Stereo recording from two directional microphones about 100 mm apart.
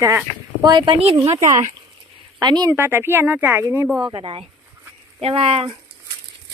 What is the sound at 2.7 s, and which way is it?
Speech, 25° right (ahead or behind).